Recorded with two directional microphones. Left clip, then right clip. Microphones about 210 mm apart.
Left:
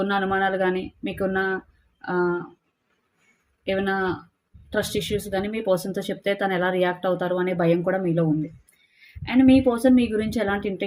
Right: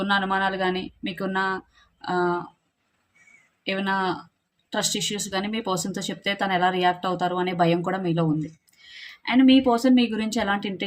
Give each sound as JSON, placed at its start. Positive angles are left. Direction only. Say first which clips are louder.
{"t": 0.0, "sound": "speech", "louder": "even", "side_deg": -25}
{"t": 3.6, "sound": "speech", "louder": "left 1 dB", "side_deg": -25}